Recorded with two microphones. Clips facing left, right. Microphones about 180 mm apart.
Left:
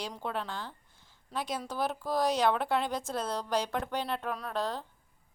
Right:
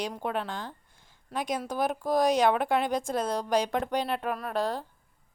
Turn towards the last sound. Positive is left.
turn(degrees=-10)  # may be behind; listen again after turning